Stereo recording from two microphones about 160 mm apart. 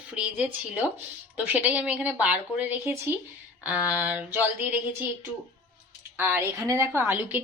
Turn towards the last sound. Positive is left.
turn(degrees=-10)  # may be behind; listen again after turning